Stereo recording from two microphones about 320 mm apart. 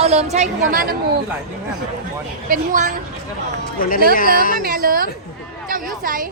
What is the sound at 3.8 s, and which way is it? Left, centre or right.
Speech, left.